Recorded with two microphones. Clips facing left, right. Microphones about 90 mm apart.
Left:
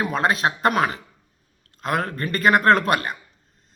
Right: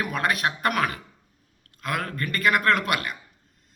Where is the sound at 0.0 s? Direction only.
25° left (ahead or behind).